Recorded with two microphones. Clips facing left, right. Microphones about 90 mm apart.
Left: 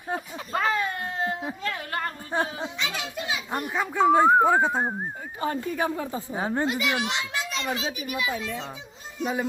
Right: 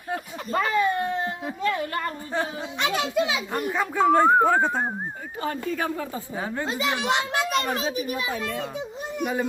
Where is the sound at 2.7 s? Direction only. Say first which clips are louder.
Right 8 dB; 60° right (ahead or behind); by 3.4 s 90° right.